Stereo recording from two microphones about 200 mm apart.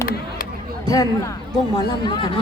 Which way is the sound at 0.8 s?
20° left (ahead or behind).